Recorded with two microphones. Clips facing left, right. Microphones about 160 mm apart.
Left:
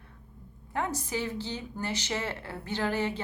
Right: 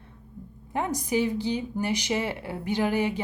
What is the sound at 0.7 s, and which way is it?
Speech, 15° right (ahead or behind).